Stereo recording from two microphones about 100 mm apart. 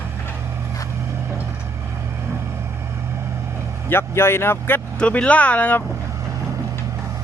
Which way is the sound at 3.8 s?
25° left (ahead or behind).